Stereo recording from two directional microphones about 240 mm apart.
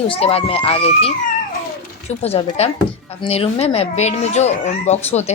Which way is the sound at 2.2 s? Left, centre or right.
Left.